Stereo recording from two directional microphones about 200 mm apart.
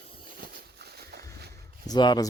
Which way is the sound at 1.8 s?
20° left (ahead or behind).